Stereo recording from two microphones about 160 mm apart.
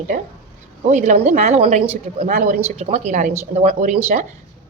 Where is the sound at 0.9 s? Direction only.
50° right (ahead or behind).